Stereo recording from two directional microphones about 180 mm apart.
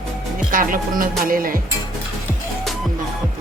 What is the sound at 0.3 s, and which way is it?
Speech, 50° right (ahead or behind).